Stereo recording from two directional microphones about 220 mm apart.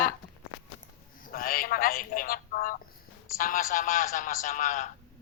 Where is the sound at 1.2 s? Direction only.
40° left (ahead or behind).